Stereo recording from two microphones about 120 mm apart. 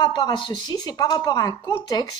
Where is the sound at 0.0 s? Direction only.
40° left (ahead or behind).